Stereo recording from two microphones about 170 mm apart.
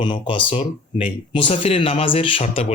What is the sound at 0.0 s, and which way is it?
Speech, 30° left (ahead or behind).